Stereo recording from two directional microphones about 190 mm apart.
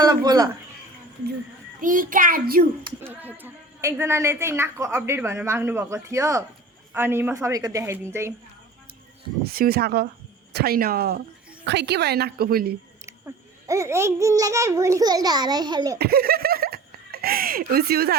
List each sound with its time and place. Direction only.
0.0 s speech: 20° right (ahead or behind)
1.8 s a child's voice: 45° right (ahead or behind)
3.0 s a woman's voice: 10° right (ahead or behind)
9.5 s a child's voice: 50° right (ahead or behind)
11.6 s a woman's voice: 65° right (ahead or behind)
13.1 s a woman's voice: 15° right (ahead or behind)
16.0 s speech: 55° right (ahead or behind)